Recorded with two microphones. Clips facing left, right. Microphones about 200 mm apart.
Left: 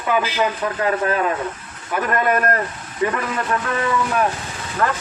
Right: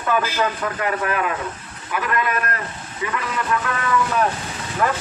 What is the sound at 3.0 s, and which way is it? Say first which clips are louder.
Speech: left 2 dB; 35° left (ahead or behind).